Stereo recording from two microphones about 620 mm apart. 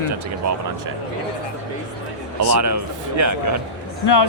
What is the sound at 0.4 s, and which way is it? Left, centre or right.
Speech, right.